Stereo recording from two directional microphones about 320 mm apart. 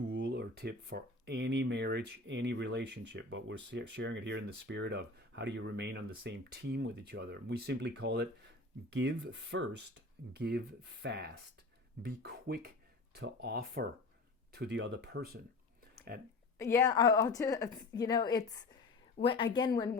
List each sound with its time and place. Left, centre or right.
0.1 s speech: right
16.6 s a woman's voice: centre